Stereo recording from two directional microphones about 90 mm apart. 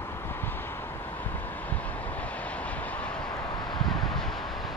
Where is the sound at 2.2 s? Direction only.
15° left (ahead or behind).